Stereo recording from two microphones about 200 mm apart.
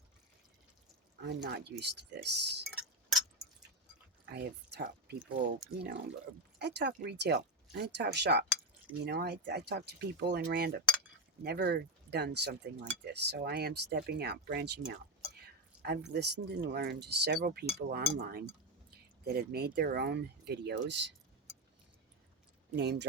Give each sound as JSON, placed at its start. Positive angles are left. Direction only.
{"t": 1.2, "sound": "speech", "side_deg": -55}
{"t": 2.6, "sound": "tick-tock", "side_deg": 0}
{"t": 4.3, "sound": "speech", "side_deg": -55}
{"t": 15.8, "sound": "speech", "side_deg": -55}
{"t": 22.7, "sound": "speech", "side_deg": -55}